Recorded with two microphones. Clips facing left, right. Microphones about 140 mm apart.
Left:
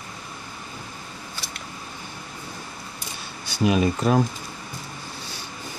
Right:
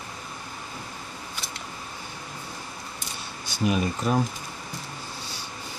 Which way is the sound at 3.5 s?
90° left.